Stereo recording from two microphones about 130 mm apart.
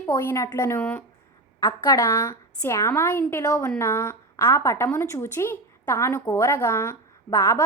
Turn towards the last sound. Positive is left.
turn(degrees=20)  # may be behind; listen again after turning